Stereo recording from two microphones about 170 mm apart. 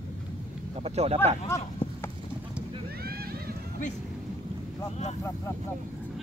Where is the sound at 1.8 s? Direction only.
30° left (ahead or behind).